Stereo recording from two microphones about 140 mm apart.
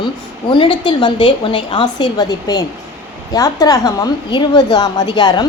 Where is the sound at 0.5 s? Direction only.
35° left (ahead or behind).